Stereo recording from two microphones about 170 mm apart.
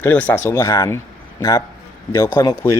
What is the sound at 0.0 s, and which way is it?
Speech, 10° left (ahead or behind).